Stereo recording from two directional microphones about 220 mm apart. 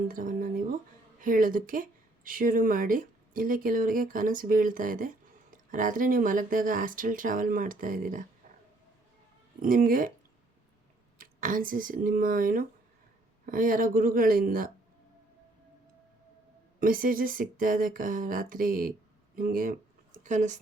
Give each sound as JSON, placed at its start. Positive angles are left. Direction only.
{"t": 0.1, "sound": "speech", "side_deg": -40}
{"t": 9.6, "sound": "speech", "side_deg": -40}
{"t": 11.2, "sound": "speech", "side_deg": -40}
{"t": 16.8, "sound": "speech", "side_deg": -40}